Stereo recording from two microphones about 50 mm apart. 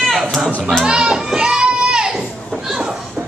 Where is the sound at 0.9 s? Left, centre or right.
Centre.